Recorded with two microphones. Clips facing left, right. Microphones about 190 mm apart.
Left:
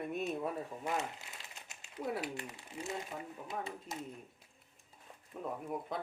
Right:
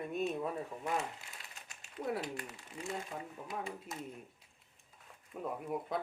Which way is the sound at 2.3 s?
20° left (ahead or behind).